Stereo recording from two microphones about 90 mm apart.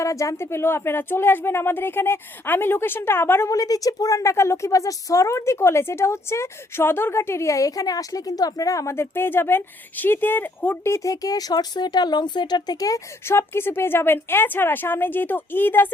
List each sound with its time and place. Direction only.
0.0 s speech: 35° left (ahead or behind)
3.5 s a woman's voice: 40° left (ahead or behind)
13.2 s speech: 25° left (ahead or behind)